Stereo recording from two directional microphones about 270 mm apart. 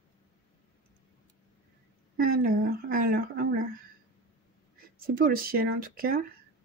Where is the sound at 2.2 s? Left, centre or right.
Right.